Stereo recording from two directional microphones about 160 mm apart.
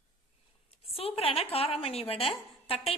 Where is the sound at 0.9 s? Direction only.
35° left (ahead or behind).